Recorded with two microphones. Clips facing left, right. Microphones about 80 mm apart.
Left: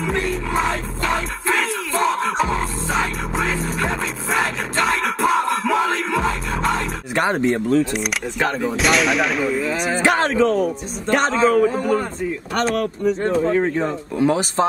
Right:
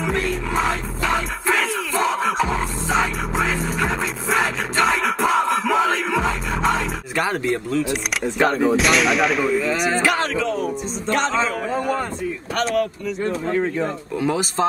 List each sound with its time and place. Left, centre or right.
0.3 s music: centre
7.2 s speech: left
7.9 s speech: centre
10.0 s speech: left
11.1 s a man's voice: centre
12.6 s speech: left
13.7 s speech: left